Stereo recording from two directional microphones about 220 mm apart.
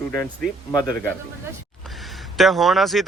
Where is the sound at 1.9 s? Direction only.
Centre (ahead or behind).